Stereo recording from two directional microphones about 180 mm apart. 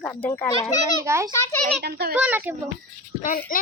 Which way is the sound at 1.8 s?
60° right (ahead or behind).